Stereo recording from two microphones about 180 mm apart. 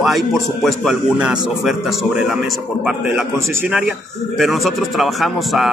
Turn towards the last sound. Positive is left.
turn(degrees=0)  # may be behind; listen again after turning